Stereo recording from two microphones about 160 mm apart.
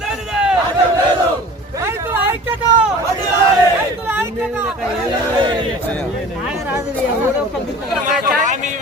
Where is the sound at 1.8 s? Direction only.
15° right (ahead or behind).